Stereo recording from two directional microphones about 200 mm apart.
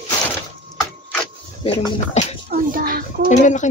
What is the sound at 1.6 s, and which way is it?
Speech, 30° left (ahead or behind).